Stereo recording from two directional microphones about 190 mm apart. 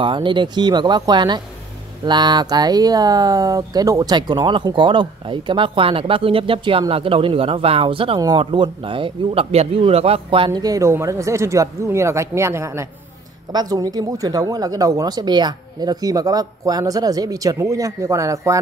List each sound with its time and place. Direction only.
0.0 s speech: 25° right (ahead or behind)